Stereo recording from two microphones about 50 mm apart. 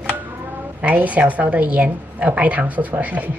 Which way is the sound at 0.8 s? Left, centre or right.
Right.